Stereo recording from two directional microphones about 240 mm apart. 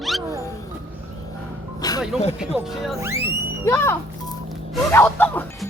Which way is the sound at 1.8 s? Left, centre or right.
Centre.